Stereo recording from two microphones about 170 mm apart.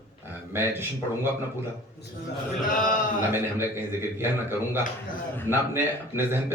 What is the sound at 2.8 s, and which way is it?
Speech, 50° left (ahead or behind).